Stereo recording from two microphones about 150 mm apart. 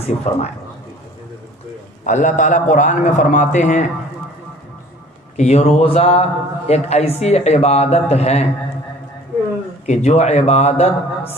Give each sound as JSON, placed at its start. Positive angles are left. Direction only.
{"t": 0.0, "sound": "a man's voice", "side_deg": 45}
{"t": 2.0, "sound": "a man's voice", "side_deg": 55}
{"t": 5.4, "sound": "a man's voice", "side_deg": 45}
{"t": 9.8, "sound": "a man's voice", "side_deg": 50}